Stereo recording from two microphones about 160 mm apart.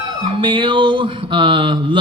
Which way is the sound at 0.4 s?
30° right (ahead or behind).